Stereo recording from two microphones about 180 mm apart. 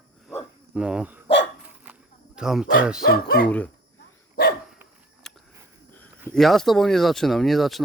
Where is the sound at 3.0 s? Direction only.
55° left (ahead or behind).